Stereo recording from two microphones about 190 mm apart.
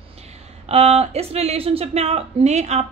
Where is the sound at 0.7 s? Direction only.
30° right (ahead or behind).